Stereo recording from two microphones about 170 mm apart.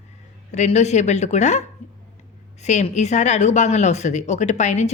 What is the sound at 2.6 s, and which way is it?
Speech, 45° left (ahead or behind).